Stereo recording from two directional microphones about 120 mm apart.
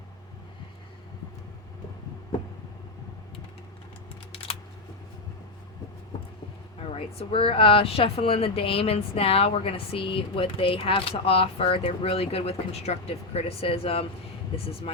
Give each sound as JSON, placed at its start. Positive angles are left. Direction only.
{"t": 6.9, "sound": "speech", "side_deg": 55}